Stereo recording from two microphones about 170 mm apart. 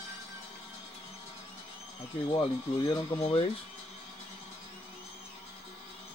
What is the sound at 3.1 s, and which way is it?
Speech, 35° left (ahead or behind).